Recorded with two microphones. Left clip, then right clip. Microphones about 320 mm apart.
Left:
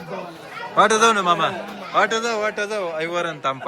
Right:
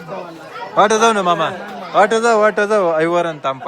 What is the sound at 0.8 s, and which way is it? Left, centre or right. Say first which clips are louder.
A man's voice: right 3 dB; centre.